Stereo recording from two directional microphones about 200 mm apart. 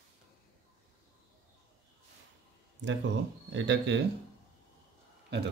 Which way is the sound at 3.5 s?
65° right (ahead or behind).